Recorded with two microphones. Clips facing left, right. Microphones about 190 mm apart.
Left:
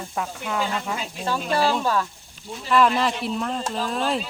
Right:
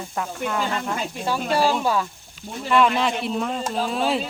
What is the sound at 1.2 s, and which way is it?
Speech, 10° right (ahead or behind).